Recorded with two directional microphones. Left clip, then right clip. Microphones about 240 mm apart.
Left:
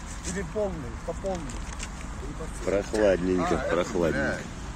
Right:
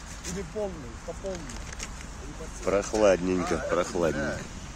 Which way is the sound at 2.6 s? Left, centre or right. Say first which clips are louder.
Right 1 dB; centre.